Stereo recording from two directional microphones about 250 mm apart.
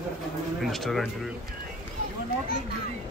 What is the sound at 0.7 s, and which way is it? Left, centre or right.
Speech, centre.